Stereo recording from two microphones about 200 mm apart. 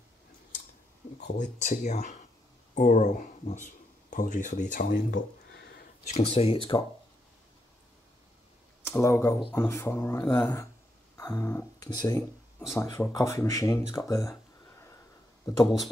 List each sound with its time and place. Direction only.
1.2 s speech: 40° left (ahead or behind)
5.1 s a sound: 55° left (ahead or behind)
6.0 s speech: 30° left (ahead or behind)
8.8 s speech: 15° left (ahead or behind)
13.9 s a sound: 15° left (ahead or behind)
15.5 s speech: 20° left (ahead or behind)